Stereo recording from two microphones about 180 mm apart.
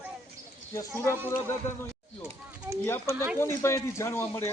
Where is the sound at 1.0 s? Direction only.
10° right (ahead or behind).